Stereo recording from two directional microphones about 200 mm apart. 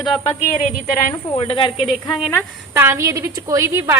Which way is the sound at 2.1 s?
10° left (ahead or behind).